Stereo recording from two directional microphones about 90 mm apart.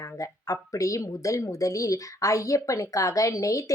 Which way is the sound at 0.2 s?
40° left (ahead or behind).